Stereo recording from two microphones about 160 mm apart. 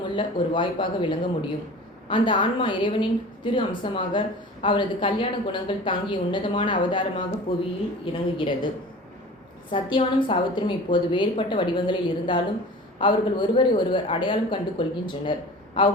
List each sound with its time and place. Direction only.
0.2 s speech: 30° left (ahead or behind)
9.7 s speech: 30° left (ahead or behind)